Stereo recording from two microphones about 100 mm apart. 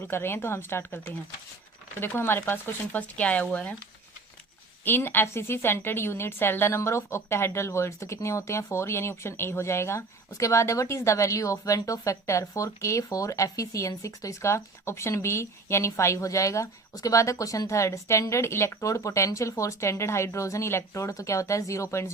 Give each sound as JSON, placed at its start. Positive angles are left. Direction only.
{"t": 0.0, "sound": "a woman's voice", "side_deg": 25}
{"t": 2.0, "sound": "speech", "side_deg": 25}
{"t": 4.9, "sound": "a woman's voice", "side_deg": 20}